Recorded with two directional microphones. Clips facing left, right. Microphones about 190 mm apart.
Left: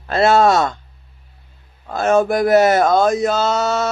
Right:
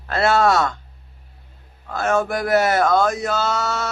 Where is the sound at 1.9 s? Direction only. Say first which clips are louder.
Left 5 dB; 20° left (ahead or behind).